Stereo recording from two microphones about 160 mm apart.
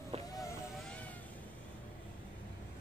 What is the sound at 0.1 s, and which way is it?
Vehicle, 35° right (ahead or behind).